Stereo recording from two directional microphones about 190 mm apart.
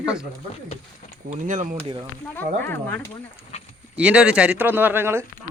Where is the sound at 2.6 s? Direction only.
10° left (ahead or behind).